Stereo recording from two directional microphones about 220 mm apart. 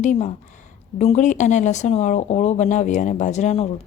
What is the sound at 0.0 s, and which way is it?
Speech, 35° left (ahead or behind).